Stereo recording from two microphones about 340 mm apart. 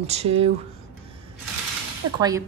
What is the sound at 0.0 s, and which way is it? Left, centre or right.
Speech, centre.